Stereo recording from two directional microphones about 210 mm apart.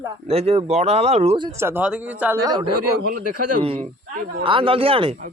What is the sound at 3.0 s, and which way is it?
Speech, 45° right (ahead or behind).